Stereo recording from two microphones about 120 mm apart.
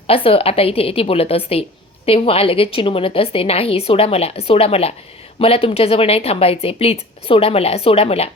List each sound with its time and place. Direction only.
0.1 s a woman's voice: 50° left (ahead or behind)